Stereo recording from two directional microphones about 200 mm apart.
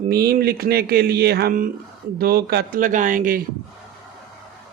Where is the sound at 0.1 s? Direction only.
50° right (ahead or behind).